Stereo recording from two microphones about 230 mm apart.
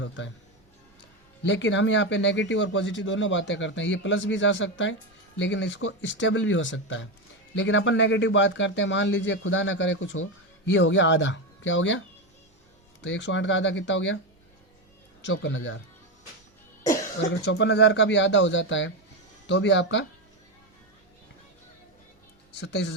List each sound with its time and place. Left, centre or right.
1.5 s speech: left
13.0 s speech: left
15.2 s speech: left
16.8 s cough: centre
17.4 s speech: left
22.6 s speech: left